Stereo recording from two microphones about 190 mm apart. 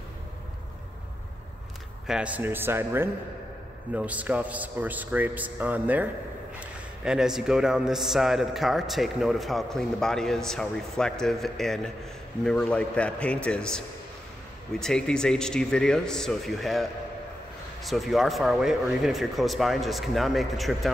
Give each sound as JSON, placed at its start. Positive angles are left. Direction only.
{"t": 2.0, "sound": "a man's voice", "side_deg": -5}